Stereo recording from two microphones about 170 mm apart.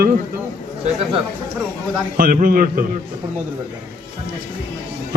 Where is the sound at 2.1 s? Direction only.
55° right (ahead or behind).